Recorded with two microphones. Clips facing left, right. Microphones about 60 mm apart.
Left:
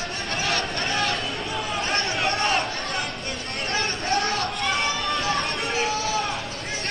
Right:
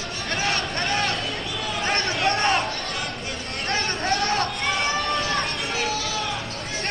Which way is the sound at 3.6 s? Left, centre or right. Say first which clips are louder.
Right 2 dB; right.